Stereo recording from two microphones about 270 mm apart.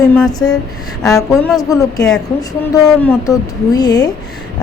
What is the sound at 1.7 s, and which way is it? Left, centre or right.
A woman's voice, centre.